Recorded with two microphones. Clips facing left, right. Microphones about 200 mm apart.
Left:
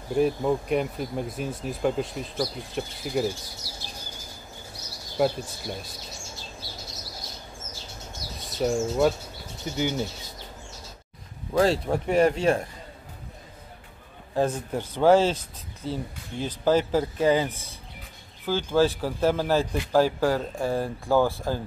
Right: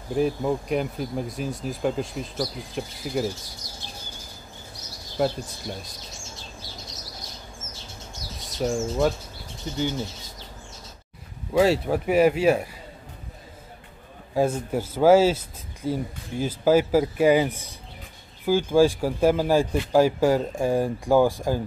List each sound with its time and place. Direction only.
0.1 s speech: centre (ahead or behind)
5.1 s speech: centre (ahead or behind)
8.5 s speech: centre (ahead or behind)
9.8 s bird: 15° left (ahead or behind)
11.5 s speech: 5° right (ahead or behind)
14.3 s speech: 10° right (ahead or behind)